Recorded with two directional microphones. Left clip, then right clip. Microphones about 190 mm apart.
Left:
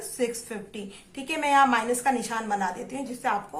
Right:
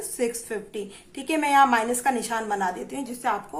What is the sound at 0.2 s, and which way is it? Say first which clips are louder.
A woman's voice: right 2 dB; 20° right (ahead or behind).